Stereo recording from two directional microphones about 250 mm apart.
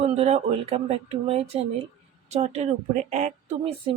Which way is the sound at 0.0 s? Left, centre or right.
Right.